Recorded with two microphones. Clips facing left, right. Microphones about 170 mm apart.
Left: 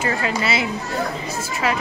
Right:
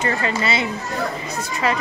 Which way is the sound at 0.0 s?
5° left (ahead or behind).